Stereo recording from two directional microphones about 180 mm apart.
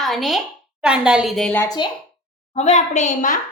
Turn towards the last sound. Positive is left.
turn(degrees=45)  # may be behind; listen again after turning